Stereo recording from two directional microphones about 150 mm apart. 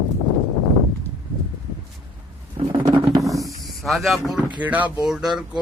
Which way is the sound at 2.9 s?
25° right (ahead or behind).